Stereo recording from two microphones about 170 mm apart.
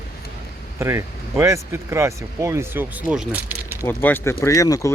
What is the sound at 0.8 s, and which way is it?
Speech, 15° right (ahead or behind).